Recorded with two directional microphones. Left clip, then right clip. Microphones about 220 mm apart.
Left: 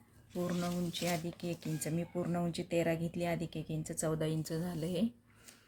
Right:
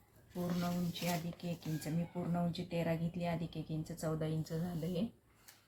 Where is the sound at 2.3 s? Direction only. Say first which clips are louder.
Left 5 dB; 55° left (ahead or behind).